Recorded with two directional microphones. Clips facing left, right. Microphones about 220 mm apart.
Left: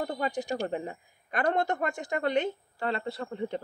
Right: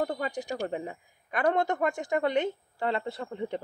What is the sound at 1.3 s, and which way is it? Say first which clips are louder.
A woman's voice: right 1 dB; 10° right (ahead or behind).